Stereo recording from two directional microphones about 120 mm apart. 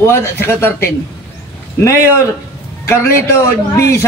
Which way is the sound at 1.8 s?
25° left (ahead or behind).